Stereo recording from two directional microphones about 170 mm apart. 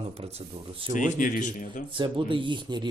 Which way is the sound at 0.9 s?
50° left (ahead or behind).